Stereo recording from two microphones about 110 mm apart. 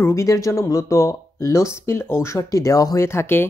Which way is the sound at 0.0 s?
25° left (ahead or behind).